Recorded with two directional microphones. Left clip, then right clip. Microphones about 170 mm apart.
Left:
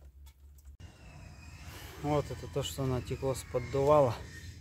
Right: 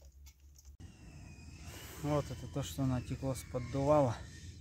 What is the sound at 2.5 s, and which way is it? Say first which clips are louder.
Speech: left 4 dB; centre (ahead or behind).